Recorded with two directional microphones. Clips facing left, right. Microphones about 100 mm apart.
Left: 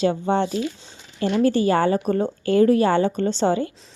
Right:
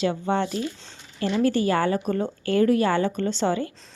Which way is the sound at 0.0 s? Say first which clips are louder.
Left 3 dB; 25° left (ahead or behind).